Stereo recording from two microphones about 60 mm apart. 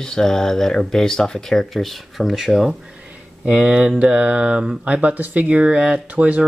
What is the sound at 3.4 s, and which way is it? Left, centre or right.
Speech, centre.